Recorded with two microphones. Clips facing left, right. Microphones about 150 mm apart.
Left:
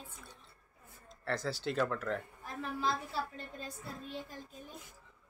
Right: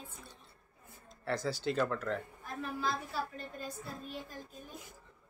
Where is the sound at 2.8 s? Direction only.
25° left (ahead or behind).